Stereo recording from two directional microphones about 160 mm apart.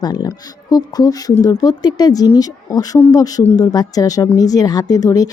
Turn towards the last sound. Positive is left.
turn(degrees=25)  # may be behind; listen again after turning